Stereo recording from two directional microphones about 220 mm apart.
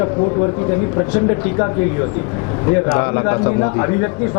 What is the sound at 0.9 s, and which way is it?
A man's voice, 25° left (ahead or behind).